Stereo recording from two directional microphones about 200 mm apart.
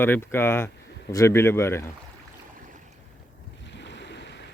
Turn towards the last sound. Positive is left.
turn(degrees=60)  # may be behind; listen again after turning